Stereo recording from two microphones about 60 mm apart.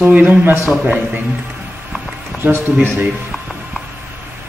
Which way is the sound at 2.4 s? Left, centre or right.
Right.